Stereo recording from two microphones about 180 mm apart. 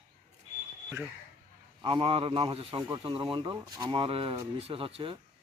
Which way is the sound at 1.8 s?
30° right (ahead or behind).